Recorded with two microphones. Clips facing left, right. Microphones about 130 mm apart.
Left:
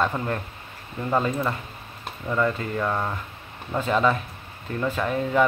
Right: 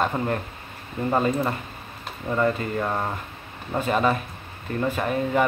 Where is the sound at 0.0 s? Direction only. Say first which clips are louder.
Right 1 dB; 15° right (ahead or behind).